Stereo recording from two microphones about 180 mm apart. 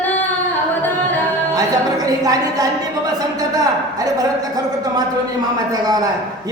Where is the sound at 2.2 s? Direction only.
20° right (ahead or behind).